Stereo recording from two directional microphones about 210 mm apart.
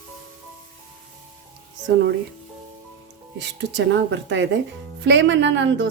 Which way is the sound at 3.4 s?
60° right (ahead or behind).